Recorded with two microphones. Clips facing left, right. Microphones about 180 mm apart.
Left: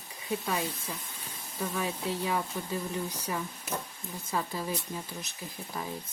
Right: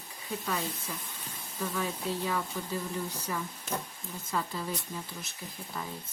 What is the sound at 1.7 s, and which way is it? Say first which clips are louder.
Speech: left 1 dB; 20° left (ahead or behind).